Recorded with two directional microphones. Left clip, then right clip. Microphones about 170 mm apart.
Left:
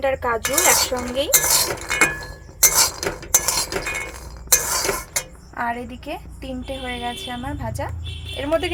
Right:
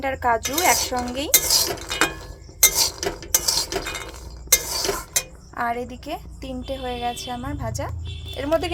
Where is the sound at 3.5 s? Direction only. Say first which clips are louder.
Left 2 dB; 10° left (ahead or behind).